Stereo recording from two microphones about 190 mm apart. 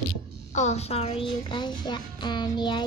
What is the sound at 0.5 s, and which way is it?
Speech, 35° left (ahead or behind).